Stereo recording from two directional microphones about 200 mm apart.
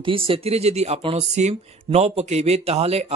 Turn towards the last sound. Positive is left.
turn(degrees=-30)  # may be behind; listen again after turning